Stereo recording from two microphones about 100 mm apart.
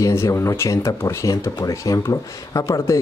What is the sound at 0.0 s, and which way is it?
Speech, 30° left (ahead or behind).